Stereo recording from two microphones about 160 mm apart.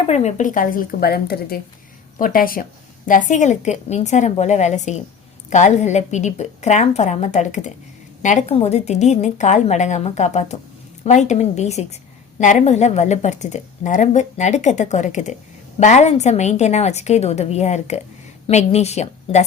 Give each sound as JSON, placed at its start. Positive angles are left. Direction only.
{"t": 0.1, "sound": "speech", "side_deg": 45}
{"t": 2.1, "sound": "speech", "side_deg": 60}
{"t": 3.1, "sound": "a woman's voice", "side_deg": 50}